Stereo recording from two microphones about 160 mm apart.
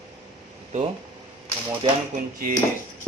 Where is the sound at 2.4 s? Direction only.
65° right (ahead or behind).